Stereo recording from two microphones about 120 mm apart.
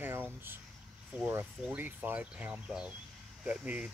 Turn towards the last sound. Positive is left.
turn(degrees=-10)  # may be behind; listen again after turning